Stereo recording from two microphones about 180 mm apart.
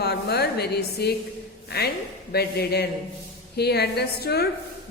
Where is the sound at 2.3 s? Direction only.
60° left (ahead or behind).